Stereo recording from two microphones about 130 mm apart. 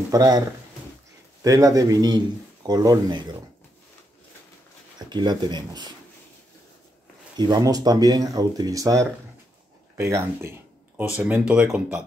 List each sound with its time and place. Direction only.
0.1 s a man's voice: 30° right (ahead or behind)
1.4 s a man's voice: 25° right (ahead or behind)
4.9 s speech: 35° right (ahead or behind)
7.3 s a man's voice: 30° right (ahead or behind); by 11.6 s 10° right (ahead or behind)